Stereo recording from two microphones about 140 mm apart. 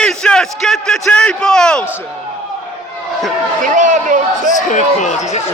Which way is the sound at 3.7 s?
60° right (ahead or behind).